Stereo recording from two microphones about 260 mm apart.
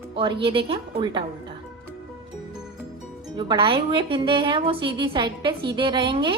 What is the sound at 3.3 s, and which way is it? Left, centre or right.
Speech, centre.